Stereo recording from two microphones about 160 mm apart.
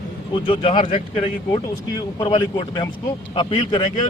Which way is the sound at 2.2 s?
30° left (ahead or behind).